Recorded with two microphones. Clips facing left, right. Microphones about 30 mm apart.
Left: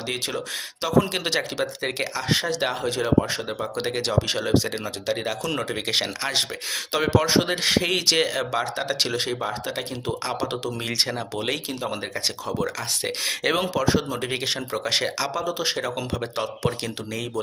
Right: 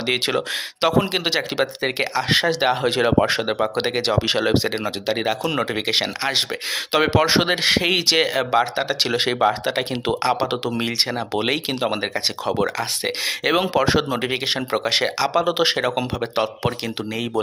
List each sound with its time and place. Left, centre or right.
0.1 s speech: right
1.1 s speech: right
2.8 s speech: right
3.2 s speech: right
3.6 s speech: right
9.1 s speech: right
12.5 s speech: right
13.2 s speech: centre
13.7 s speech: right
14.2 s speech: right
15.3 s speech: right
15.7 s speech: right
16.2 s speech: right